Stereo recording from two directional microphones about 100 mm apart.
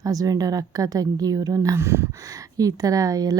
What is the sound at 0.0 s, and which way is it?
A woman's voice, 40° right (ahead or behind).